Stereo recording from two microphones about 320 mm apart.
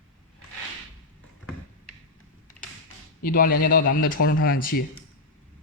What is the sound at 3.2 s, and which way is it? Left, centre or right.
A man's voice, left.